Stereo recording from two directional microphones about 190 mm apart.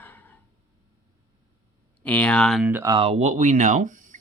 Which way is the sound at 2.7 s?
15° right (ahead or behind).